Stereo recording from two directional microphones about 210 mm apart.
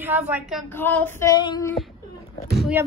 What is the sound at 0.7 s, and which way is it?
Female singing, 10° left (ahead or behind).